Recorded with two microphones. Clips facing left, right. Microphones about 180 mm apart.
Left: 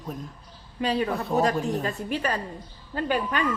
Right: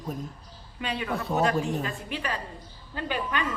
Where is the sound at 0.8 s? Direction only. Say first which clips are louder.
Left 7 dB; 35° left (ahead or behind).